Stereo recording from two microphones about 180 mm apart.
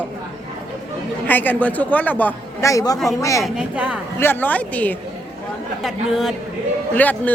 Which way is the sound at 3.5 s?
5° right (ahead or behind).